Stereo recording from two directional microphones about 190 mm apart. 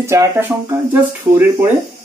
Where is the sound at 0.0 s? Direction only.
15° right (ahead or behind).